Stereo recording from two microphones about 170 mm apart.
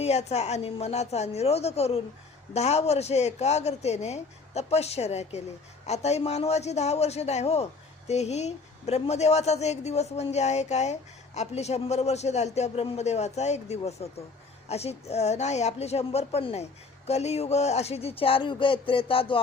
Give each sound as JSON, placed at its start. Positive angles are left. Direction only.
{"t": 0.0, "sound": "a man's voice", "side_deg": 40}